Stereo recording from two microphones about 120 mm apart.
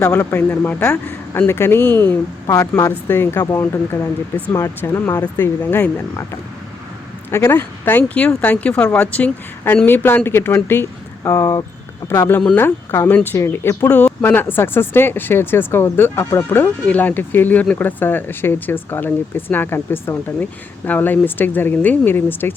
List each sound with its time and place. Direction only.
0.0 s speech: 25° left (ahead or behind)
2.5 s speech: 25° left (ahead or behind)
7.3 s speech: 20° left (ahead or behind)